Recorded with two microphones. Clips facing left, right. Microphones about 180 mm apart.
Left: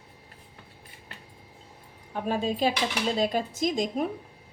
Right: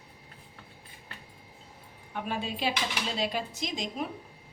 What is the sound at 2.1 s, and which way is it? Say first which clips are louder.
A woman's voice: left 6 dB; 40° left (ahead or behind).